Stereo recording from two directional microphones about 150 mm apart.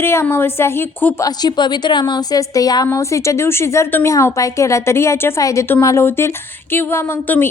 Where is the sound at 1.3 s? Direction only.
30° left (ahead or behind).